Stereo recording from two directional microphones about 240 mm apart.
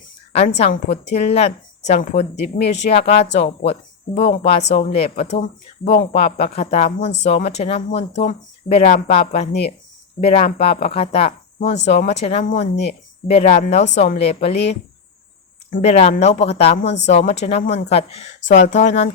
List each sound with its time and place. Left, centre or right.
0.3 s speech: left
3.2 s a woman's voice: left
3.4 s speech: left
16.8 s a woman's voice: left
17.1 s speech: left
18.4 s a woman's voice: left
18.7 s speech: left